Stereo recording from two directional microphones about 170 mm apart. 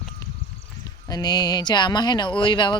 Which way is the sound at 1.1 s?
25° left (ahead or behind).